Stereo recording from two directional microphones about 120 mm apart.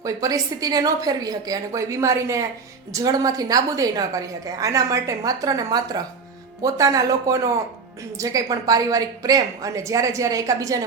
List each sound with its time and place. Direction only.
0.0 s a woman's voice: 30° right (ahead or behind)